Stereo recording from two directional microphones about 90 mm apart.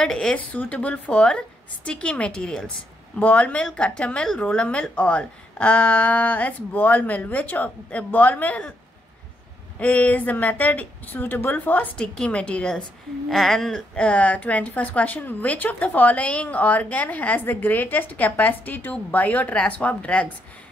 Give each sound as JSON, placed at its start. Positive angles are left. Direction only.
{"t": 0.0, "sound": "a woman's voice", "side_deg": 10}
{"t": 9.8, "sound": "a woman's voice", "side_deg": 15}